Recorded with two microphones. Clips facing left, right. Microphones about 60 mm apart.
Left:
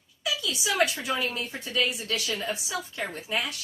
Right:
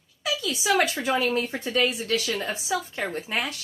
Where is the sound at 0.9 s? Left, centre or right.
Right.